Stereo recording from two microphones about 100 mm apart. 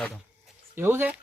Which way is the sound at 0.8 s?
20° right (ahead or behind).